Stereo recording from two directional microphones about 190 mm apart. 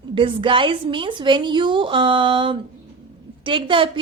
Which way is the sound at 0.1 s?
25° right (ahead or behind).